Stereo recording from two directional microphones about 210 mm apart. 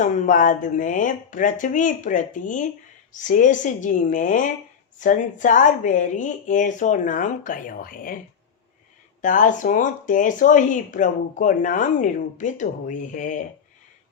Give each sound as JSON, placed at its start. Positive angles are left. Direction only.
{"t": 0.0, "sound": "speech", "side_deg": 40}
{"t": 9.2, "sound": "speech", "side_deg": 40}